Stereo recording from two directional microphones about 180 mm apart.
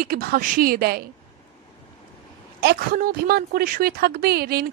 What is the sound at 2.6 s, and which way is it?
Speech, 60° right (ahead or behind).